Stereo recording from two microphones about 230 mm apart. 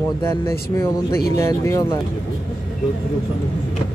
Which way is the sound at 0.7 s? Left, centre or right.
Centre.